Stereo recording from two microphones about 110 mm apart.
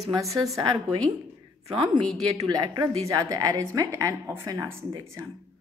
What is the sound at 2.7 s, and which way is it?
Speech, 50° right (ahead or behind).